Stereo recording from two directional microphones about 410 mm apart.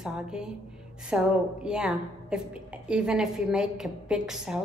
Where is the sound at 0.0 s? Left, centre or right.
Centre.